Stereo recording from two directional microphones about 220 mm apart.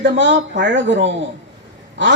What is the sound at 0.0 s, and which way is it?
Speech, 55° right (ahead or behind).